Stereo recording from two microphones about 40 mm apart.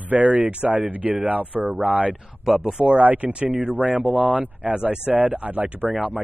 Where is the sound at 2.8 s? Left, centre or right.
Right.